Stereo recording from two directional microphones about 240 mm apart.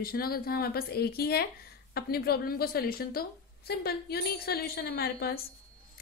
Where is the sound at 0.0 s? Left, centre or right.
Left.